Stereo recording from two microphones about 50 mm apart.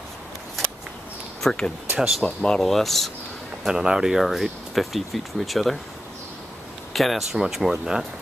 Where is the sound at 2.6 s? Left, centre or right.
Centre.